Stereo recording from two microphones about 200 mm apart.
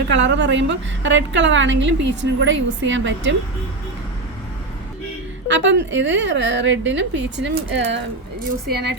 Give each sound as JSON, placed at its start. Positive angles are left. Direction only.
{"t": 0.3, "sound": "a woman's voice", "side_deg": -60}
{"t": 5.5, "sound": "a woman's voice", "side_deg": -65}